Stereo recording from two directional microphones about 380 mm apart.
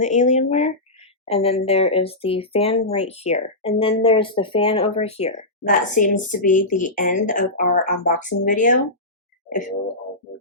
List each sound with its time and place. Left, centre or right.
0.0 s speech: centre